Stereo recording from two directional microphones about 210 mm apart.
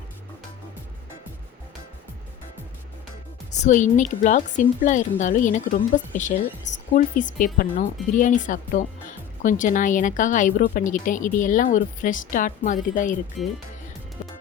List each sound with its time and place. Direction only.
3.5 s speech: 35° left (ahead or behind)
13.4 s speech: centre (ahead or behind)